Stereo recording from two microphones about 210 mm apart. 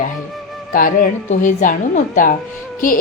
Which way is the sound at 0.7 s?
40° left (ahead or behind).